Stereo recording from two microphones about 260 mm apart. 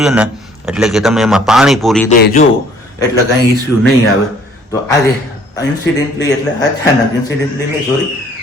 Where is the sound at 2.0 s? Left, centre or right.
Left.